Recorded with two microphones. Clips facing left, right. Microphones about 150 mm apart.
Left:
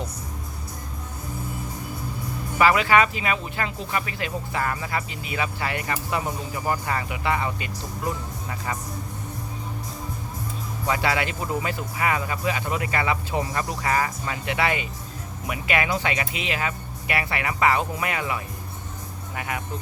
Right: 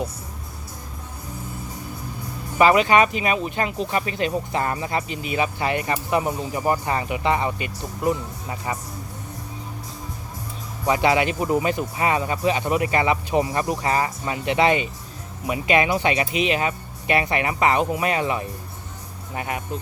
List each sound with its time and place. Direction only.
2.6 s speech: 20° right (ahead or behind)
10.8 s speech: 20° right (ahead or behind)